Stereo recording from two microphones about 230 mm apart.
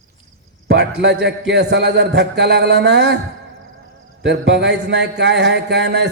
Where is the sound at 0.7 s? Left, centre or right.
Right.